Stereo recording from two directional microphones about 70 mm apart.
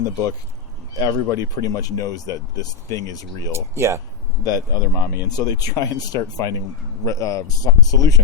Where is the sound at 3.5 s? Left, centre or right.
Right.